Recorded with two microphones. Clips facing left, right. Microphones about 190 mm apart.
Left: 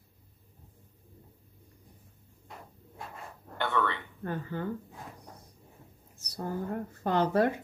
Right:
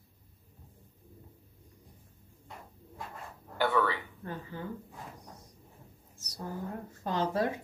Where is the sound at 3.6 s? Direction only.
5° right (ahead or behind).